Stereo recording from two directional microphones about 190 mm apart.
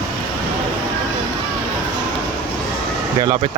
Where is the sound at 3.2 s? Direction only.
25° right (ahead or behind).